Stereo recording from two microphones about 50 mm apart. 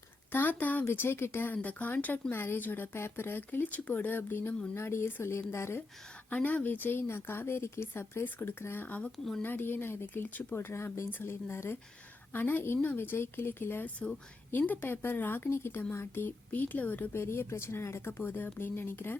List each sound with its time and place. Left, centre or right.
0.3 s speech: left
0.9 s speech: left
1.5 s speech: left
2.3 s speech: left
4.7 s speech: left
6.3 s speech: left
8.2 s speech: left
8.8 s speech: left
9.1 s speech: centre
9.4 s speech: left
11.1 s speech: left
16.5 s speech: left
17.1 s speech: left